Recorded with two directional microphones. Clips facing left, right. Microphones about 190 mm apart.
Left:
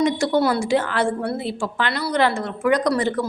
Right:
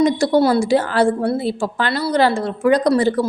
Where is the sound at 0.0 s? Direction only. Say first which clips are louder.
Right 4 dB; 35° right (ahead or behind).